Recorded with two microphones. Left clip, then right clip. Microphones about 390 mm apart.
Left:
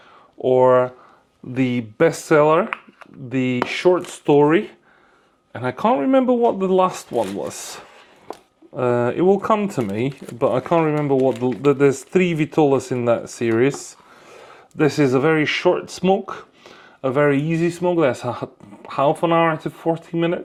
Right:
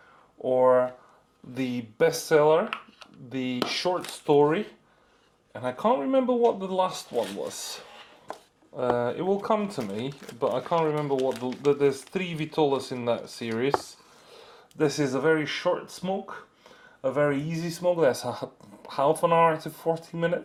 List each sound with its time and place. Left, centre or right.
0.4 s speech: left
8.7 s speech: left